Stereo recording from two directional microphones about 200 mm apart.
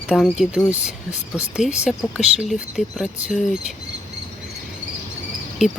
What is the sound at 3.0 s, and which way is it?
Speech, 40° left (ahead or behind).